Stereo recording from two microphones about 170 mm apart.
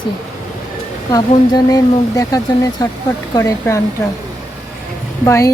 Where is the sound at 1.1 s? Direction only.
20° left (ahead or behind).